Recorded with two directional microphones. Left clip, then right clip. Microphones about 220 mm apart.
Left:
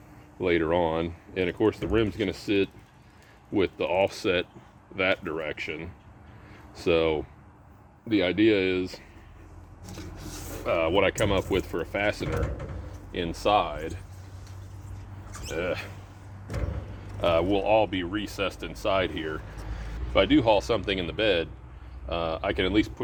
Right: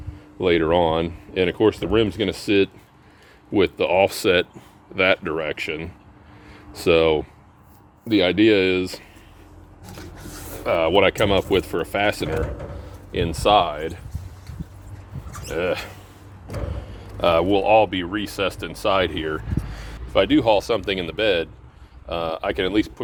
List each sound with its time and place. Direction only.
0.3 s speech: 45° right (ahead or behind)
10.6 s speech: 45° right (ahead or behind)
15.4 s speech: 45° right (ahead or behind)
17.2 s speech: 45° right (ahead or behind)